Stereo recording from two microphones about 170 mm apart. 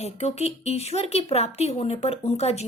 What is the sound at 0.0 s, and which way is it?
Speech, 40° left (ahead or behind).